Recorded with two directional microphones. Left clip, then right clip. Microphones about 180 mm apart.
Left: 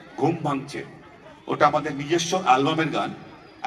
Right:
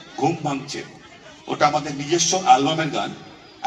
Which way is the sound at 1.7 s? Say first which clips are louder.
Right 1 dB; 30° left (ahead or behind).